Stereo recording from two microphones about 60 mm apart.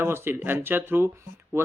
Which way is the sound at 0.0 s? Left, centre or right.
Right.